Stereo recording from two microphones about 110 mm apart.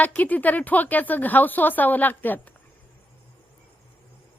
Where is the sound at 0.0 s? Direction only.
15° left (ahead or behind).